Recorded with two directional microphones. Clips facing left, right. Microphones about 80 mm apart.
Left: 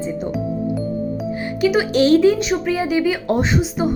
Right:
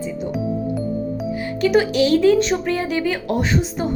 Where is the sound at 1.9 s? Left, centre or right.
Left.